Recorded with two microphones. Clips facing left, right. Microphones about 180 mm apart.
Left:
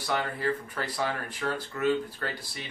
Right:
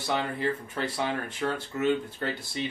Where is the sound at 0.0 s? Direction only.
25° right (ahead or behind).